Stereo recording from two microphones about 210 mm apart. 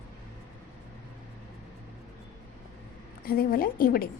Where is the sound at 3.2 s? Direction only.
45° left (ahead or behind).